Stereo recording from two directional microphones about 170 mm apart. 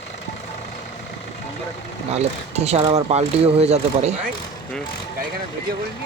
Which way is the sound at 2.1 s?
40° right (ahead or behind).